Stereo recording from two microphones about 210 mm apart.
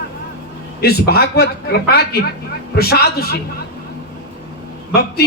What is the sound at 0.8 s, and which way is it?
Speech, 50° left (ahead or behind).